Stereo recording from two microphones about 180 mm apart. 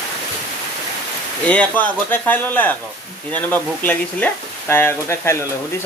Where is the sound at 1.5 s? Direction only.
10° left (ahead or behind).